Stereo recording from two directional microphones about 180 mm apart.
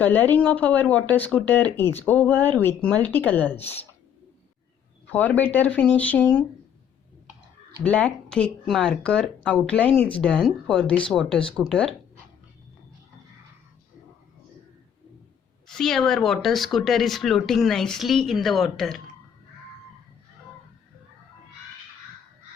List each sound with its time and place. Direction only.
0.0 s speech: 10° left (ahead or behind)
3.6 s speech: 35° left (ahead or behind)
5.1 s speech: 10° left (ahead or behind)
7.9 s speech: 5° left (ahead or behind)
15.6 s speech: centre (ahead or behind)